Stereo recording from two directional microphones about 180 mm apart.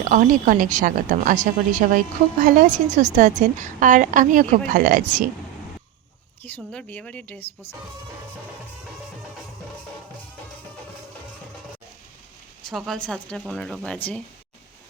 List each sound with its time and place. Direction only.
0.1 s a woman's voice: 45° right (ahead or behind)
6.4 s a woman's voice: 5° left (ahead or behind)
12.6 s speech: centre (ahead or behind)